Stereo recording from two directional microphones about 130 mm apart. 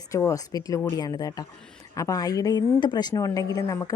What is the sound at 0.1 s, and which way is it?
A woman's voice, 25° left (ahead or behind).